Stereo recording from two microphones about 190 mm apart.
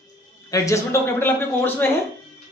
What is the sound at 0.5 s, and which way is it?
A woman's voice, 15° left (ahead or behind).